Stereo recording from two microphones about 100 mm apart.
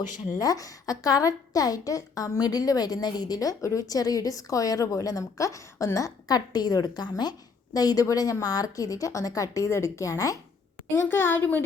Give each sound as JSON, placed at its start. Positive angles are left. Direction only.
{"t": 0.3, "sound": "a woman's voice", "side_deg": 35}
{"t": 10.9, "sound": "speech", "side_deg": 25}